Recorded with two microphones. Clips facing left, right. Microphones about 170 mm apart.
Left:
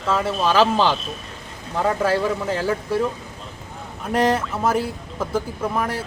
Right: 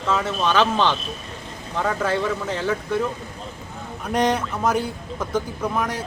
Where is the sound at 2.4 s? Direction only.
5° left (ahead or behind).